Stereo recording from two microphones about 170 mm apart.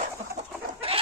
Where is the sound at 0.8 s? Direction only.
35° right (ahead or behind).